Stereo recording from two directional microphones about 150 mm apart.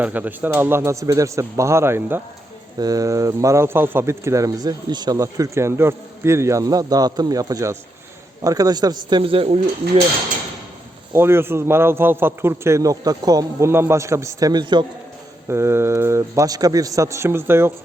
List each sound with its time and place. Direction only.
0.0 s a man's voice: 10° right (ahead or behind)
2.7 s speech: 25° right (ahead or behind)
11.1 s a man's voice: 15° right (ahead or behind)
15.4 s a man's voice: 15° right (ahead or behind)